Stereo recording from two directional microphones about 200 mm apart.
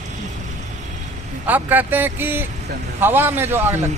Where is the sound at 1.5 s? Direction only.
10° right (ahead or behind).